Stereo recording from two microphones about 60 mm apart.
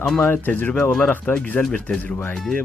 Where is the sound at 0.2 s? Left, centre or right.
Left.